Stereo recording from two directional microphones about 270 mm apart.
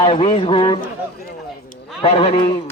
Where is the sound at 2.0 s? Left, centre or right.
Left.